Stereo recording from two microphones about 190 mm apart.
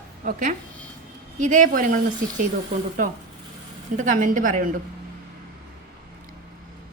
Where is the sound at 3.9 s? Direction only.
40° right (ahead or behind).